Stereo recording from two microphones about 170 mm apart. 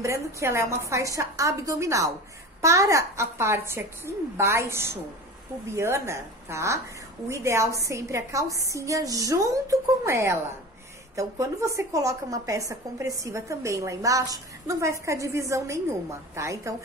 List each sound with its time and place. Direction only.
0.0 s a woman's voice: 15° right (ahead or behind)